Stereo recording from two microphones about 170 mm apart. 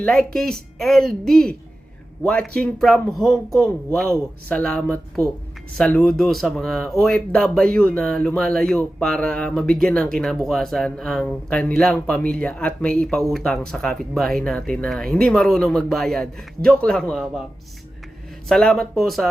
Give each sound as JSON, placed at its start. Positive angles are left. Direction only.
{"t": 0.0, "sound": "speech", "side_deg": 5}
{"t": 18.4, "sound": "speech", "side_deg": 5}